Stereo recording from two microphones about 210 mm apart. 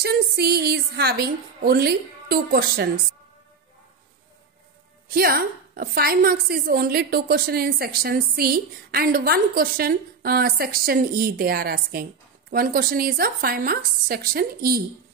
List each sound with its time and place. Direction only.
0.0 s a woman's voice: 50° right (ahead or behind)
5.0 s a woman's voice: 45° right (ahead or behind)